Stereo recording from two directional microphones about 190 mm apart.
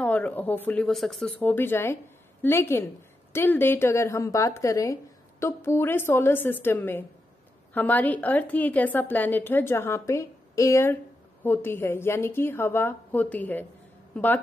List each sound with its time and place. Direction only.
0.0 s a woman's voice: 5° left (ahead or behind)